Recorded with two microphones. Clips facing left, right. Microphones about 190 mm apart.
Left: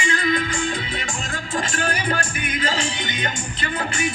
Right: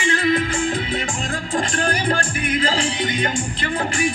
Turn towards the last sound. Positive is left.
turn(degrees=-35)  # may be behind; listen again after turning